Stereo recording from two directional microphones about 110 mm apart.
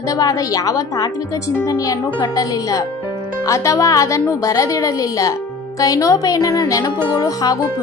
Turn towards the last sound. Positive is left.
turn(degrees=35)  # may be behind; listen again after turning